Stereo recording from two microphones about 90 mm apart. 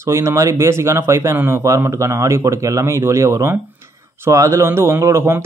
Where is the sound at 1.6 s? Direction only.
35° right (ahead or behind).